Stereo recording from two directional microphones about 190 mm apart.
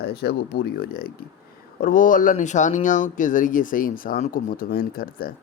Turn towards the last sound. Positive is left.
turn(degrees=50)  # may be behind; listen again after turning